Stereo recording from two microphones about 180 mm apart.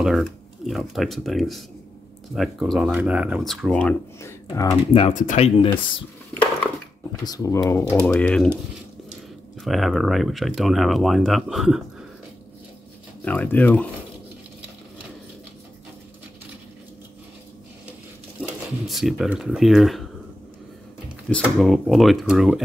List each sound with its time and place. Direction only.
0.0 s speech: centre (ahead or behind); by 4.7 s 20° left (ahead or behind)
5.1 s speech: 40° left (ahead or behind)
6.3 s a sound: 10° left (ahead or behind)
7.2 s speech: 20° left (ahead or behind)
7.9 s speech: 5° left (ahead or behind)
9.6 s speech: centre (ahead or behind)
13.2 s speech: 10° left (ahead or behind)
18.4 s speech: centre (ahead or behind)
21.3 s speech: centre (ahead or behind)